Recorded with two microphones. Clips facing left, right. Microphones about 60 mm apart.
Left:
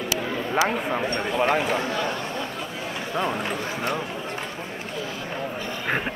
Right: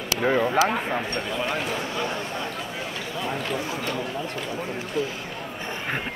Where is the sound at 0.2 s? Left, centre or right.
Right.